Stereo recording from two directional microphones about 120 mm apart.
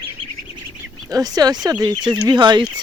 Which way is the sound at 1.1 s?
30° right (ahead or behind).